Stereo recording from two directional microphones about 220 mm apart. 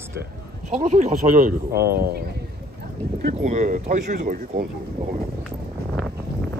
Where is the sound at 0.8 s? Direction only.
30° right (ahead or behind).